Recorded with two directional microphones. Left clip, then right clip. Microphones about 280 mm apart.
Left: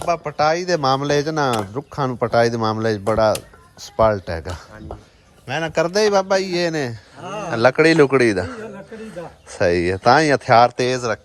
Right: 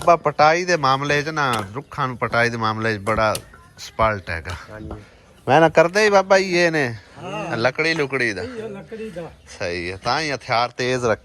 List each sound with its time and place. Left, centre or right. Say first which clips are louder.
0.0 s speech: right 4 dB; centre
5.5 s speech: right 7 dB; centre
7.2 s speech: left 1 dB; left
7.5 s speech: left 6 dB; left